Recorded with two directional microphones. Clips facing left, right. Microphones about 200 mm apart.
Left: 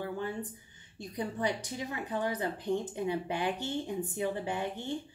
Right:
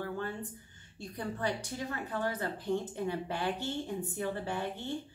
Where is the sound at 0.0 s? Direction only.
15° left (ahead or behind).